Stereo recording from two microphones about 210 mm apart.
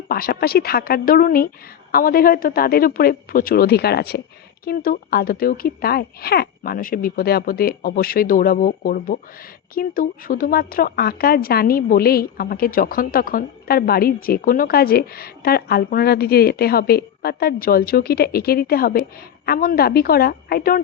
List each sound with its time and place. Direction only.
0.1 s speech: 45° left (ahead or behind)